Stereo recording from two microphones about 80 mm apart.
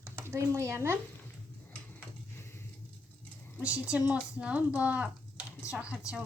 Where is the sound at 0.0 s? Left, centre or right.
Right.